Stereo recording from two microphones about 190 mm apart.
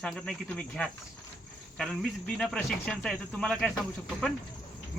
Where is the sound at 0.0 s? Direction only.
5° left (ahead or behind).